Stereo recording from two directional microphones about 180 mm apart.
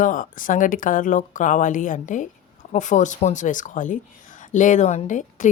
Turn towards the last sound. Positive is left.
turn(degrees=45)  # may be behind; listen again after turning